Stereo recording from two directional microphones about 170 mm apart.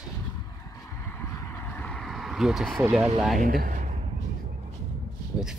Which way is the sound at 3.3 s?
55° right (ahead or behind).